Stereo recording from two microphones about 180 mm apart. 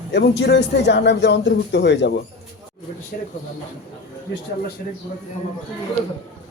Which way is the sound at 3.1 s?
45° left (ahead or behind).